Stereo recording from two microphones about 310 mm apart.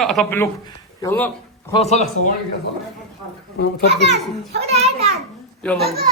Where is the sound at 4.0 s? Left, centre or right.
Right.